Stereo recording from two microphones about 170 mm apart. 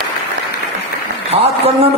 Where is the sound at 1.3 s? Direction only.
35° right (ahead or behind).